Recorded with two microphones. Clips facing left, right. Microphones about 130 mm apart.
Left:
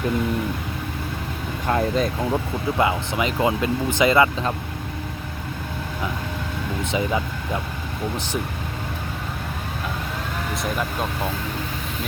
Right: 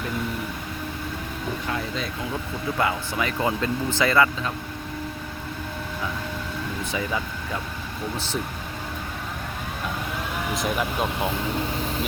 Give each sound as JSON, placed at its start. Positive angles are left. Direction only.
{"t": 1.6, "sound": "speech", "side_deg": 50}
{"t": 2.7, "sound": "speech", "side_deg": 20}
{"t": 6.9, "sound": "speech", "side_deg": 20}
{"t": 10.5, "sound": "speech", "side_deg": -5}